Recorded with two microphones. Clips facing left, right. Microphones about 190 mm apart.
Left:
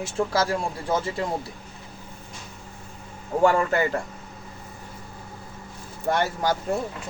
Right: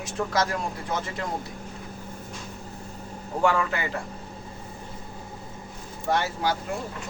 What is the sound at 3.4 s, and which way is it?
Speech, 40° left (ahead or behind).